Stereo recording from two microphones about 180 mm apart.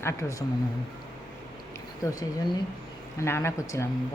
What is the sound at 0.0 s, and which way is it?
Speech, 15° left (ahead or behind).